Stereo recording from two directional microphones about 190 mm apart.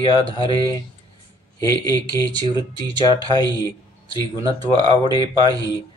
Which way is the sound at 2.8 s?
20° right (ahead or behind).